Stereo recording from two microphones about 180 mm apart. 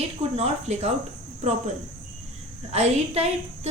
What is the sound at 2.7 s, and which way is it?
Speech, 35° right (ahead or behind).